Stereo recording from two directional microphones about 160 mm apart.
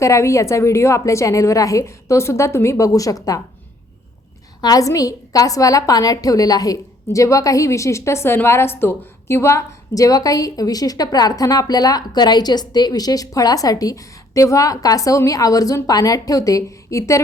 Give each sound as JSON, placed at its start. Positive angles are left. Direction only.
{"t": 0.0, "sound": "a woman's voice", "side_deg": 20}
{"t": 4.6, "sound": "a woman's voice", "side_deg": 20}